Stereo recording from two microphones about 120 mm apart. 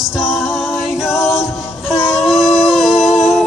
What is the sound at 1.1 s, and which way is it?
A capella, 25° left (ahead or behind).